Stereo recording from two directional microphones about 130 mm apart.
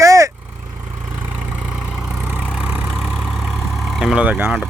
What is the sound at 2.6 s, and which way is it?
Vehicle, 10° right (ahead or behind).